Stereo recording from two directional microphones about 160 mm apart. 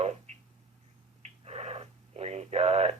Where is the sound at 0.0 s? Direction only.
45° right (ahead or behind).